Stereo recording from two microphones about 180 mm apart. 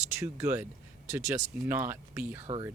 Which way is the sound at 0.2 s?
15° right (ahead or behind).